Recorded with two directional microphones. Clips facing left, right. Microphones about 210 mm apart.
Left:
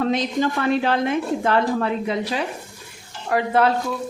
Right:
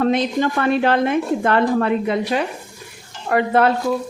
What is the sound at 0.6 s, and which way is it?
A woman's voice, 60° right (ahead or behind).